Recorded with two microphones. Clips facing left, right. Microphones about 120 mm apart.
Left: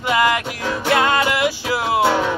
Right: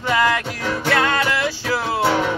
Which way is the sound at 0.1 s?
15° left (ahead or behind).